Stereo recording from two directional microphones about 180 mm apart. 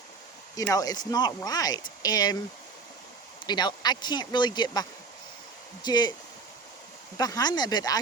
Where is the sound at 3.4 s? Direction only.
25° left (ahead or behind).